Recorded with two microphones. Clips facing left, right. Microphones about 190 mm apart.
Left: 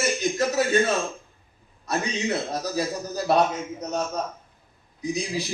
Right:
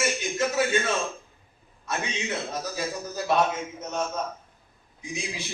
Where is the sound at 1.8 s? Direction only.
35° left (ahead or behind).